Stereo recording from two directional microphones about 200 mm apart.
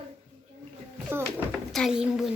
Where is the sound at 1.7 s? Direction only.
Centre (ahead or behind).